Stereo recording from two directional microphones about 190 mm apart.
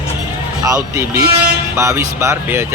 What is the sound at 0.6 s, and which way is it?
Speech, 15° right (ahead or behind).